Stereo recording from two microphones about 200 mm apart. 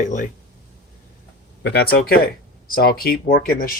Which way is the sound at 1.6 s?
55° left (ahead or behind).